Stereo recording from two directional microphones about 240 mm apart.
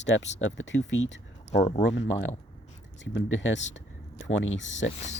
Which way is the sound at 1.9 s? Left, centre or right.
Left.